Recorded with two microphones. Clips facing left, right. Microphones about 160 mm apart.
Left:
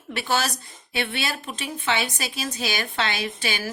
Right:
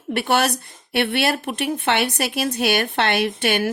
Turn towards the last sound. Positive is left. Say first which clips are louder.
# right 9 dB
turn(degrees=-60)  # may be behind; listen again after turning